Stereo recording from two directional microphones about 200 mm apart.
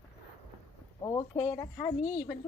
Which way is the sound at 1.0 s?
15° left (ahead or behind).